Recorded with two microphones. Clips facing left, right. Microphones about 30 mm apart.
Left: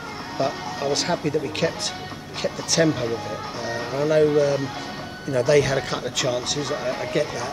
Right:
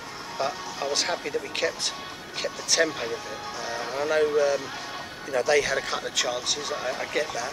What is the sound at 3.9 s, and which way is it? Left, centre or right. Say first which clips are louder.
Speech: left 5 dB; centre.